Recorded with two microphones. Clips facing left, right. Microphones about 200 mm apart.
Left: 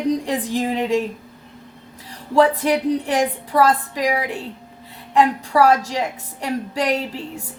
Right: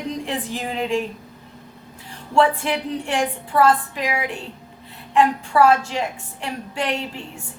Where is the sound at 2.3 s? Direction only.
40° left (ahead or behind).